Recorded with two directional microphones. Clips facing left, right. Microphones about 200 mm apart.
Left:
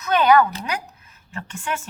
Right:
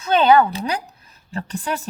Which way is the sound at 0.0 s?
30° right (ahead or behind).